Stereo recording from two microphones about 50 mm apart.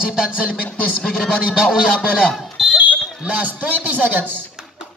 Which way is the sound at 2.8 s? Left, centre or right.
Right.